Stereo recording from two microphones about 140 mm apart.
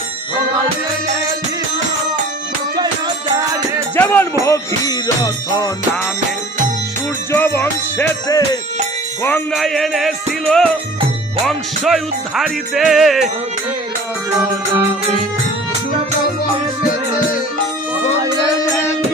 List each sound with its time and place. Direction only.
3.9 s music: 15° left (ahead or behind)
4.4 s music: 25° left (ahead or behind)
7.3 s music: 15° left (ahead or behind)
9.5 s music: centre (ahead or behind)